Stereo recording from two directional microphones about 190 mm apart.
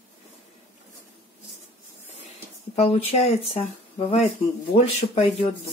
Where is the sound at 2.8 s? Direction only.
30° left (ahead or behind).